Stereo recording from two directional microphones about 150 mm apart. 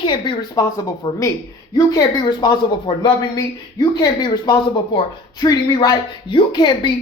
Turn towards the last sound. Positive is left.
turn(degrees=30)  # may be behind; listen again after turning